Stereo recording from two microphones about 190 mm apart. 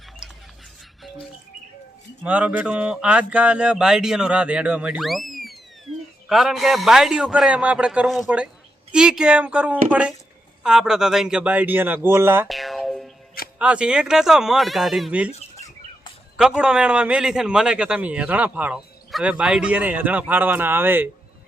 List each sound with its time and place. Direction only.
0.2 s a sound: 5° right (ahead or behind)
2.2 s a man's voice: 10° right (ahead or behind)
12.5 s music: centre (ahead or behind)
13.6 s speech: 5° right (ahead or behind)
15.3 s chicken: 35° left (ahead or behind)
16.4 s a man's voice: 5° right (ahead or behind)